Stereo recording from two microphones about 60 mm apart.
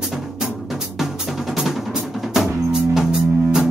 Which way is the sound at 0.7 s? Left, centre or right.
Centre.